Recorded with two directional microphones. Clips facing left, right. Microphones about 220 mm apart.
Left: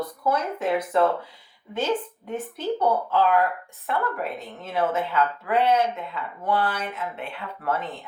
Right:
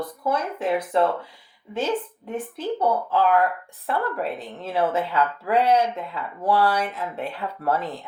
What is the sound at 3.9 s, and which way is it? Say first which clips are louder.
Speech: right 2 dB; 30° right (ahead or behind).